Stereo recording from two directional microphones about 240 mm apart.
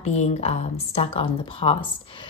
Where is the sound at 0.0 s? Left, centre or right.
Left.